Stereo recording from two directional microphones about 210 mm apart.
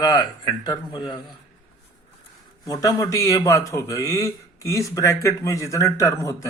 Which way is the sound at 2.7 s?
15° left (ahead or behind).